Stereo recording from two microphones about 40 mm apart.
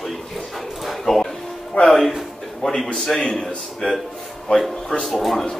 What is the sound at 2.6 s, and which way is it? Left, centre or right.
Speech, centre.